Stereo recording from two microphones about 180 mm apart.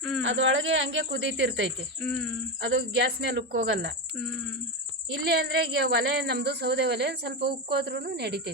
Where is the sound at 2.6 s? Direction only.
70° right (ahead or behind).